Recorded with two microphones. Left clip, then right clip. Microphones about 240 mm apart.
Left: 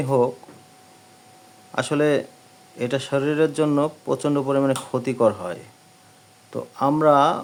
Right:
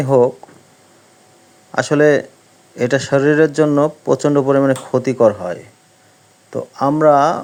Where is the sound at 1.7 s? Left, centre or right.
Centre.